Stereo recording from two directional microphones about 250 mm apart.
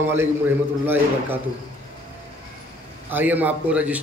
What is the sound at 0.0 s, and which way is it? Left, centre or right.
A man's voice, centre.